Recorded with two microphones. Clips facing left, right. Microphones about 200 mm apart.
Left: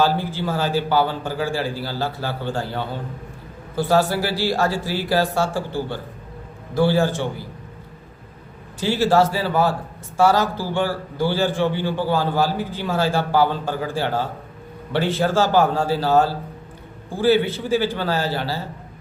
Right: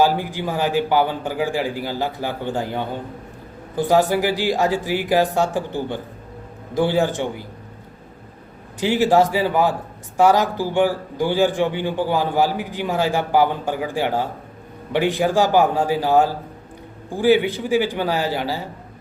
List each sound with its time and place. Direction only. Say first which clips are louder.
0.0 s a man's voice: right 2 dB; 15° right (ahead or behind)
8.8 s a man's voice: right 1 dB; 15° right (ahead or behind)